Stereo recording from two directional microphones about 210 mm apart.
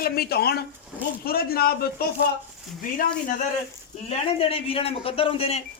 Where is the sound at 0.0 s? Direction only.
45° left (ahead or behind).